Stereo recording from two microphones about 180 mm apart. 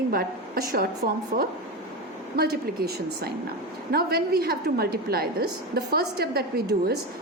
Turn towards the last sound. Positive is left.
turn(degrees=-60)  # may be behind; listen again after turning